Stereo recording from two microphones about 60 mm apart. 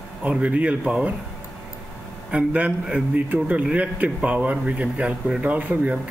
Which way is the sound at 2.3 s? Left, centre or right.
Right.